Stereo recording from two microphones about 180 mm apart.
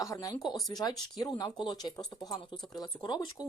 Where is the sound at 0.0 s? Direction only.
20° left (ahead or behind).